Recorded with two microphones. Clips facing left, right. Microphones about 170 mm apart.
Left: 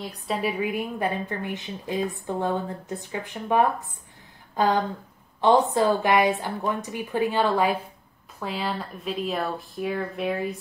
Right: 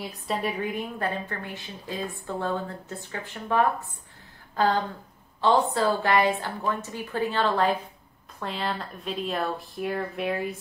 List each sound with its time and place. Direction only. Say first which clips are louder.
0.0 s a woman's voice: left 2 dB; centre (ahead or behind)